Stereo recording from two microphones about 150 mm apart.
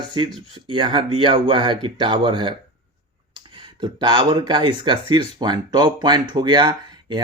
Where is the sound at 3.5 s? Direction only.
30° right (ahead or behind).